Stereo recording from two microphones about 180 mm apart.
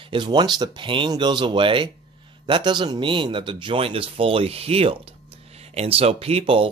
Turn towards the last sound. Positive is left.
turn(degrees=-30)  # may be behind; listen again after turning